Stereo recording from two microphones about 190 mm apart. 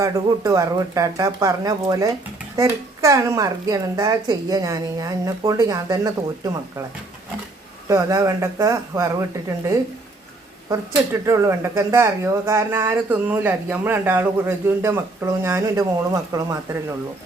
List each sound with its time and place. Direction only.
0.0 s speech: 15° right (ahead or behind)
7.9 s speech: 15° right (ahead or behind)